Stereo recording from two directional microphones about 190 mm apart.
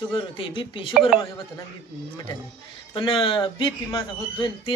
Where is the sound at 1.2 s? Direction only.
25° left (ahead or behind).